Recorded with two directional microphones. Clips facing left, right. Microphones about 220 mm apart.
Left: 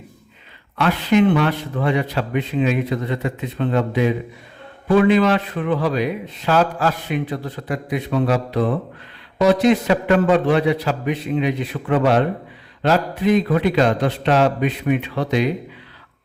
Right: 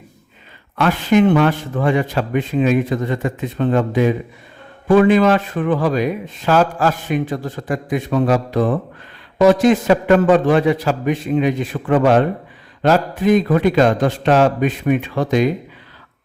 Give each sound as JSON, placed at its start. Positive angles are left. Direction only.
{"t": 0.8, "sound": "a man's voice", "side_deg": -45}